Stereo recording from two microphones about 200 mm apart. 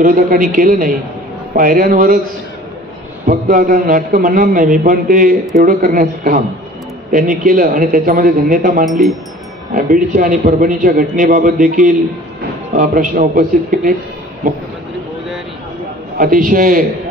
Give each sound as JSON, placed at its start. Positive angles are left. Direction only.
{"t": 0.0, "sound": "a man's voice", "side_deg": -45}
{"t": 3.3, "sound": "a man's voice", "side_deg": -45}
{"t": 8.8, "sound": "speech", "side_deg": 0}
{"t": 9.8, "sound": "a man's voice", "side_deg": -45}
{"t": 16.2, "sound": "a man's voice", "side_deg": -45}